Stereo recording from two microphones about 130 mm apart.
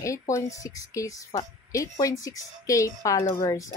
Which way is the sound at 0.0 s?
25° left (ahead or behind).